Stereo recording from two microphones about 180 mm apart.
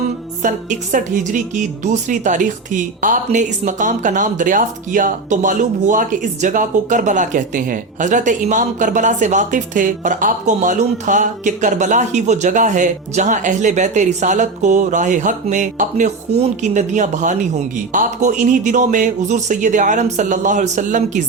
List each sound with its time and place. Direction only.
0.4 s speech: 45° right (ahead or behind)